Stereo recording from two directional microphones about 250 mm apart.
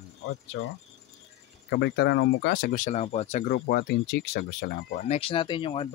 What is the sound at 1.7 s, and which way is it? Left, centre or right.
Speech, left.